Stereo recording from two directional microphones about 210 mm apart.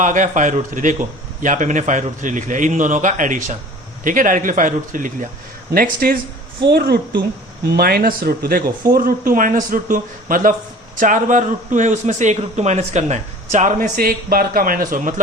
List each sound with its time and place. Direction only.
0.0 s speech: 35° right (ahead or behind)
8.6 s speech: 20° right (ahead or behind)
9.0 s speech: 45° right (ahead or behind)